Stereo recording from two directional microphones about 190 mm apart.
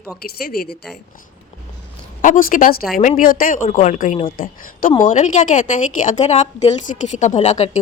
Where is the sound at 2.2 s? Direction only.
45° left (ahead or behind).